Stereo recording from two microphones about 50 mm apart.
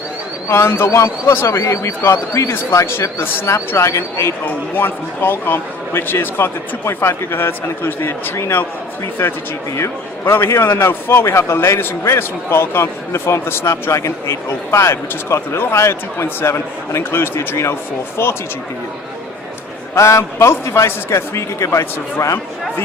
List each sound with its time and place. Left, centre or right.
0.4 s a man's voice: left
3.8 s a man's voice: left
4.4 s a man's voice: left
9.2 s a man's voice: left
9.7 s a man's voice: left
10.3 s a man's voice: left
20.0 s a man's voice: left